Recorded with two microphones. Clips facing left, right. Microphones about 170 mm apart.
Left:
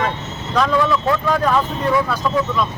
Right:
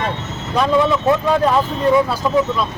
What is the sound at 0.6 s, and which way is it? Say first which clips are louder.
Speech: right 2 dB; 20° right (ahead or behind).